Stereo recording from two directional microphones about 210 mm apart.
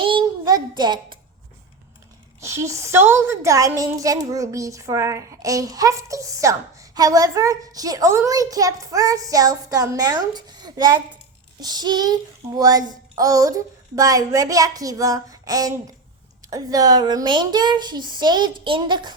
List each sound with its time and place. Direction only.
0.0 s child singing: 25° right (ahead or behind)
2.4 s a woman's voice: 15° right (ahead or behind)